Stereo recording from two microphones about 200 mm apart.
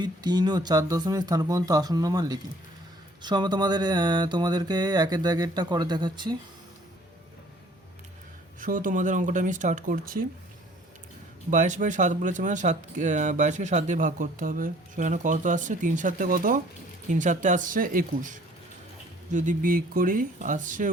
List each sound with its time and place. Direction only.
0.0 s speech: 20° right (ahead or behind)
8.6 s speech: 40° right (ahead or behind)
11.5 s speech: 40° right (ahead or behind)